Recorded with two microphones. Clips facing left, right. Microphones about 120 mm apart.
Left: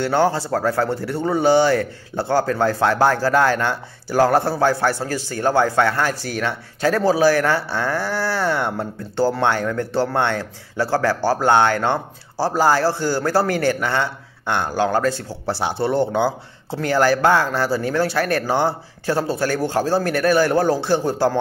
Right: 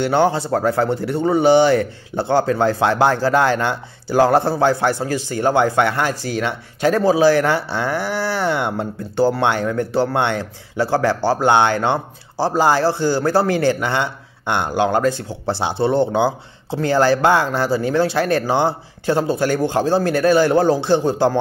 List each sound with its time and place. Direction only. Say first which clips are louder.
0.0 s speech: right 2 dB; 20° right (ahead or behind)